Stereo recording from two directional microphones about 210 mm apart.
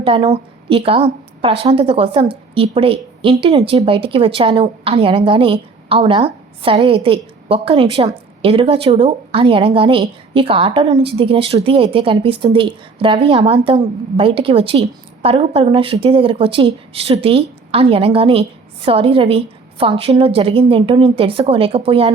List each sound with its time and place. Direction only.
0.0 s a woman's voice: 25° right (ahead or behind)